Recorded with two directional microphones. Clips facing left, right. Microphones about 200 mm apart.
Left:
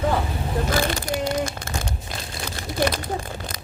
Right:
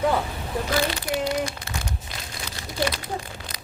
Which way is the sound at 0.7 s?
50° left (ahead or behind).